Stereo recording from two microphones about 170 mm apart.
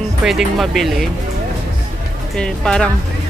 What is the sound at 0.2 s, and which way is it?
Speech, centre (ahead or behind).